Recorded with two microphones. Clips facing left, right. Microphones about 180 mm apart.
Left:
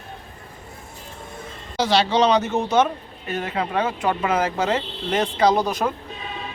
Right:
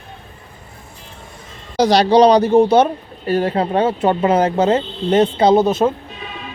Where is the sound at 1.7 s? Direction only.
40° right (ahead or behind).